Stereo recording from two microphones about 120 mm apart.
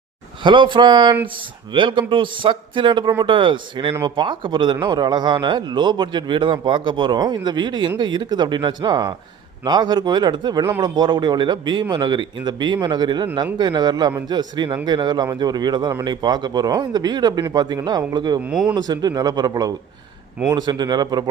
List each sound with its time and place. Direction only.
0.4 s speech: 40° right (ahead or behind)
18.4 s speech: 5° right (ahead or behind)
18.7 s speech: 35° right (ahead or behind)